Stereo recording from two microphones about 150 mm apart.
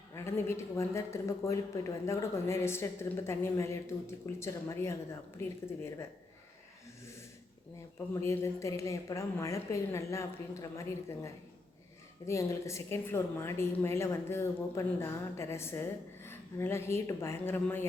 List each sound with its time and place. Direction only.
0.1 s a woman's voice: 15° left (ahead or behind)
7.0 s a sound: 20° left (ahead or behind)
8.1 s a woman's voice: 20° left (ahead or behind)